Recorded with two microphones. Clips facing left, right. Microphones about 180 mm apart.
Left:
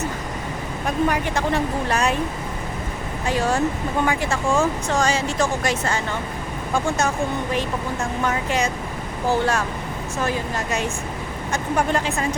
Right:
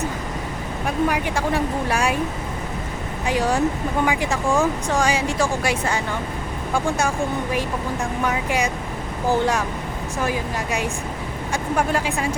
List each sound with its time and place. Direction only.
0.9 s speech: 10° right (ahead or behind)
3.2 s speech: 15° right (ahead or behind)
8.2 s speech: 10° right (ahead or behind)